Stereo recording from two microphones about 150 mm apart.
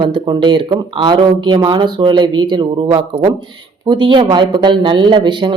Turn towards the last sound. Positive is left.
turn(degrees=-30)  # may be behind; listen again after turning